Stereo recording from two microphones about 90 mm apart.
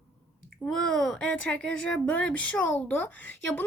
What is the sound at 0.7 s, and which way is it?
Speech, 5° left (ahead or behind).